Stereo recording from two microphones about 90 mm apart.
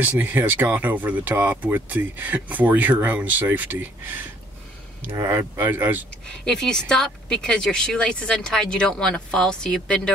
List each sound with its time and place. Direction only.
0.0 s speech: 20° right (ahead or behind)
5.1 s speech: 35° right (ahead or behind)
5.4 s speech: 20° right (ahead or behind)
6.2 s a woman's voice: 10° left (ahead or behind)